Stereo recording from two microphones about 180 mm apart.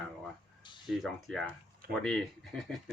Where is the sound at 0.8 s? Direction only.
Centre (ahead or behind).